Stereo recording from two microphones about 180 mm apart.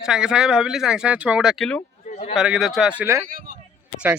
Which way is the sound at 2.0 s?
45° left (ahead or behind).